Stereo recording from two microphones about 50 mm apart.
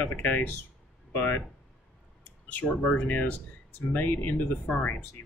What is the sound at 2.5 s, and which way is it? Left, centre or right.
Speech, left.